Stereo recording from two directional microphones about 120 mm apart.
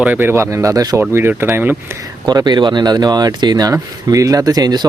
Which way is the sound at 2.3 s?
35° right (ahead or behind).